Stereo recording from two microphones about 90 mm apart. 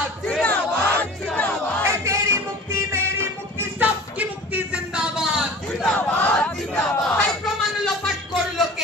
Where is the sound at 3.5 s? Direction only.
15° right (ahead or behind).